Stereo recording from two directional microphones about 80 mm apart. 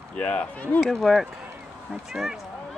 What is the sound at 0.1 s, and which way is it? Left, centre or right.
Speech, centre.